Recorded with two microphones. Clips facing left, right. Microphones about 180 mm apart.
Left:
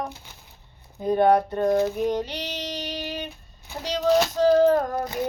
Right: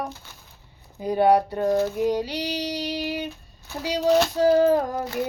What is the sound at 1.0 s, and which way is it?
Music, 10° right (ahead or behind).